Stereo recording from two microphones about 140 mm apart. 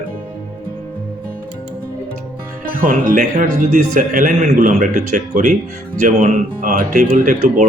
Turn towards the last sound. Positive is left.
turn(degrees=-70)  # may be behind; listen again after turning